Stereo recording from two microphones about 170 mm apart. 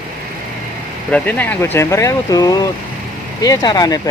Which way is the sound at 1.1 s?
10° left (ahead or behind).